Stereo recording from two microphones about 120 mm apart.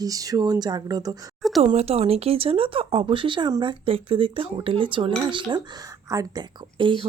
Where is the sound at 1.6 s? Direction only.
60° right (ahead or behind); by 5.6 s 45° right (ahead or behind).